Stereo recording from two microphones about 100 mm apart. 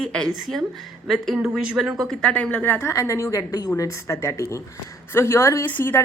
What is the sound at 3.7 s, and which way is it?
Speech, 30° left (ahead or behind).